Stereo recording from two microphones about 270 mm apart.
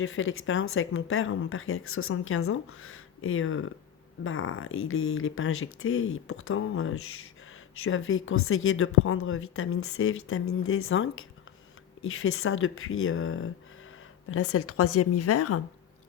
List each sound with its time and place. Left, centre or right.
0.0 s a woman's voice: left